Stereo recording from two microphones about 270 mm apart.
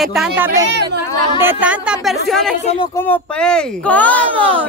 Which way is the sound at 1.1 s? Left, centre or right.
Centre.